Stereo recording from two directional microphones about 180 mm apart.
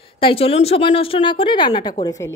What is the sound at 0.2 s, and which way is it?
Speech, 30° left (ahead or behind).